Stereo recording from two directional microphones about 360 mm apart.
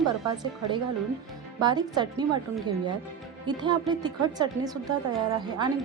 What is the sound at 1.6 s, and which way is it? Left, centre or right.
Speech, centre.